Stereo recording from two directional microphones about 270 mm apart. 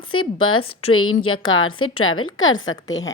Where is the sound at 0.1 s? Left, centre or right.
Left.